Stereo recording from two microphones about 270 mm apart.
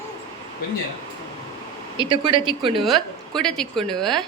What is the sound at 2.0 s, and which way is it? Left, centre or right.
Speech, centre.